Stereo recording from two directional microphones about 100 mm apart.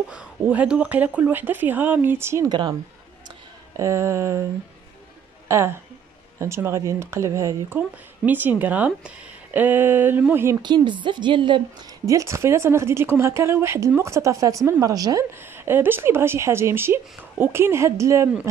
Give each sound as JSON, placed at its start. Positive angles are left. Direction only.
{"t": 0.1, "sound": "a woman's voice", "side_deg": -15}
{"t": 3.7, "sound": "a woman's voice", "side_deg": -30}
{"t": 5.5, "sound": "a woman's voice", "side_deg": -25}
{"t": 8.3, "sound": "speech", "side_deg": -20}
{"t": 10.6, "sound": "a woman's voice", "side_deg": -50}
{"t": 12.1, "sound": "a woman's voice", "side_deg": -30}
{"t": 15.3, "sound": "a woman's voice", "side_deg": -25}